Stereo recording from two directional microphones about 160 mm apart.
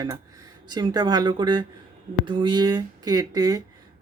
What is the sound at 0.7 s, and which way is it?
Speech, 25° right (ahead or behind).